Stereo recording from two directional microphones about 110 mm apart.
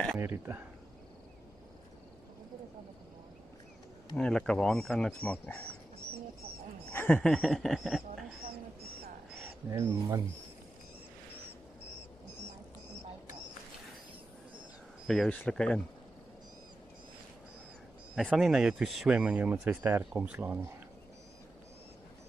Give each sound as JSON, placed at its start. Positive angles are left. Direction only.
{"t": 0.2, "sound": "speech", "side_deg": -20}
{"t": 4.2, "sound": "speech", "side_deg": 10}
{"t": 6.9, "sound": "a sound", "side_deg": 20}
{"t": 7.2, "sound": "speech", "side_deg": 5}
{"t": 7.4, "sound": "a sound", "side_deg": 0}
{"t": 9.7, "sound": "speech", "side_deg": -30}
{"t": 15.0, "sound": "speech", "side_deg": 5}
{"t": 18.1, "sound": "speech", "side_deg": 0}